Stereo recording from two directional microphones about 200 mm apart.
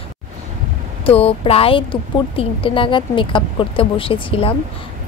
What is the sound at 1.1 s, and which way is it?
A woman's voice, 30° left (ahead or behind).